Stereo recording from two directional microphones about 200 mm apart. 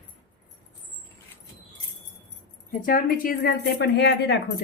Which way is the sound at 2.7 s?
40° left (ahead or behind).